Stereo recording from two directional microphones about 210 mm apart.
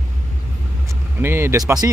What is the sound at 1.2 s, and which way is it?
Speech, 10° right (ahead or behind).